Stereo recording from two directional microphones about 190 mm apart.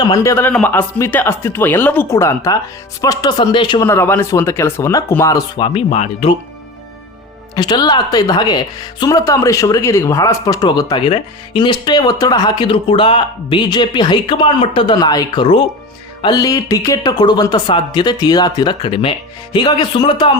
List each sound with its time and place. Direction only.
0.0 s speech: 20° left (ahead or behind); by 6.3 s 35° left (ahead or behind)
7.5 s speech: 20° left (ahead or behind)